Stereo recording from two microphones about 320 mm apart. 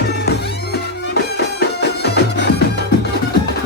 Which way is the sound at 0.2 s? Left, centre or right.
Left.